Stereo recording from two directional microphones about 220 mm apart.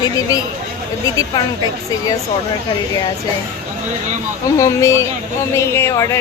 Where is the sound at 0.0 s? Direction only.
15° left (ahead or behind).